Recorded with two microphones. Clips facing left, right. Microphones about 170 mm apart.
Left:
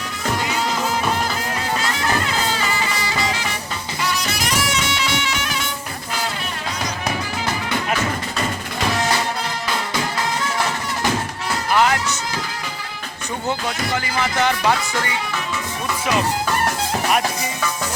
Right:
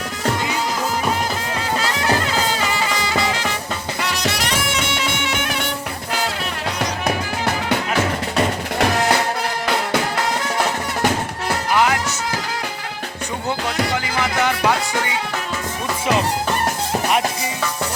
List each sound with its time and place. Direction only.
4.1 s music: 75° right (ahead or behind); by 5.7 s 60° right (ahead or behind)
6.7 s music: 65° right (ahead or behind)
10.6 s music: 60° right (ahead or behind)
11.7 s music: 15° right (ahead or behind)
14.0 s music: 15° right (ahead or behind)
16.0 s music: 30° right (ahead or behind)